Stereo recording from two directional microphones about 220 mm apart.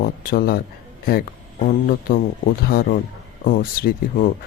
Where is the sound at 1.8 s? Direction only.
40° left (ahead or behind).